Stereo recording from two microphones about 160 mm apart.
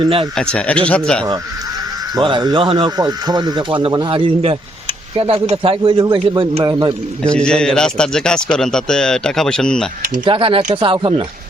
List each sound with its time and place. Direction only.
0.0 s speech: 35° right (ahead or behind)
0.3 s a man's voice: 5° left (ahead or behind)
2.1 s speech: 25° right (ahead or behind)
7.3 s a man's voice: 5° left (ahead or behind)
10.2 s speech: 35° right (ahead or behind)